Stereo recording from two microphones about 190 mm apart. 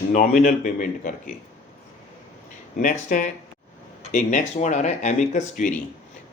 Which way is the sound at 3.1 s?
45° left (ahead or behind).